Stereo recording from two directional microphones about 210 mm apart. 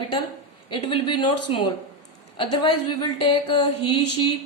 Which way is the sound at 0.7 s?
25° left (ahead or behind).